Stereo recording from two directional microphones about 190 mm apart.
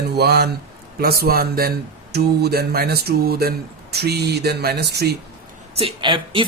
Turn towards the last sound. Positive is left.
turn(degrees=-25)  # may be behind; listen again after turning